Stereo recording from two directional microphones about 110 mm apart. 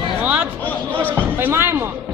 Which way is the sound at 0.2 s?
10° right (ahead or behind).